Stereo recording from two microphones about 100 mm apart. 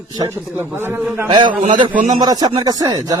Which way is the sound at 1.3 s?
50° right (ahead or behind).